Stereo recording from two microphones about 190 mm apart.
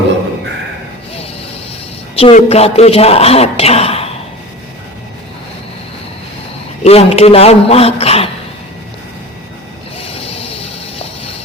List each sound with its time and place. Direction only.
2.1 s a man's voice: 30° left (ahead or behind)
6.8 s a man's voice: 30° left (ahead or behind)
10.0 s a sound: 30° left (ahead or behind)